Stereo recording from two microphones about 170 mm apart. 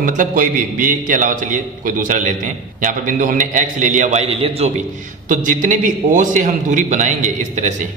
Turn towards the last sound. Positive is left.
turn(degrees=-45)  # may be behind; listen again after turning